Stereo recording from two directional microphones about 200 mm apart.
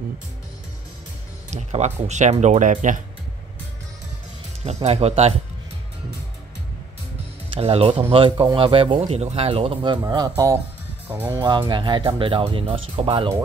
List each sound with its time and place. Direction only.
1.5 s speech: 35° right (ahead or behind)
4.8 s speech: 30° right (ahead or behind)
7.5 s speech: 30° right (ahead or behind); by 11.4 s 10° right (ahead or behind)
11.4 s speech: 20° right (ahead or behind)